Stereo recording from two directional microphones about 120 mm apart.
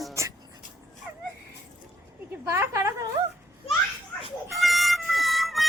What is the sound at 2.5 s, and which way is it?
Speech, 25° right (ahead or behind).